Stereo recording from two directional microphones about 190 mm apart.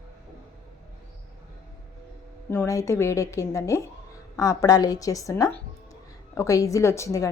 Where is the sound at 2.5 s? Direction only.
15° left (ahead or behind).